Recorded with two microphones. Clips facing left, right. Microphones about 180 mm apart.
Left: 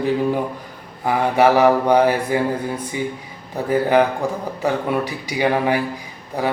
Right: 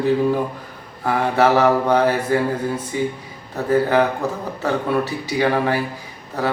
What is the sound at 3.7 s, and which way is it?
Mantra, 15° left (ahead or behind).